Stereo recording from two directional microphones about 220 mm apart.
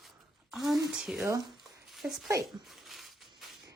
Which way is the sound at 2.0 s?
Centre (ahead or behind).